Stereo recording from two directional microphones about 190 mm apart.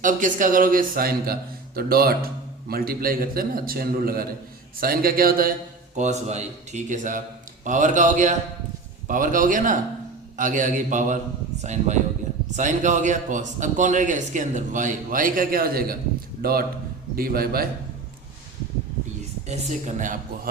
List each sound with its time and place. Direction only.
0.0 s a man's voice: 45° right (ahead or behind)
6.0 s a man's voice: 35° right (ahead or behind); by 17.7 s 50° right (ahead or behind)
19.5 s a man's voice: 40° right (ahead or behind)